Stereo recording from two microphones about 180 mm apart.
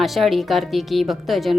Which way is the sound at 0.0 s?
Centre (ahead or behind).